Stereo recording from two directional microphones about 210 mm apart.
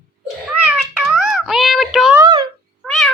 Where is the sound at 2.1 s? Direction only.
20° right (ahead or behind).